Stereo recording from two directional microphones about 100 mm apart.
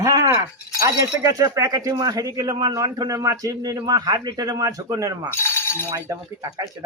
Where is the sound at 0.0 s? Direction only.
35° right (ahead or behind).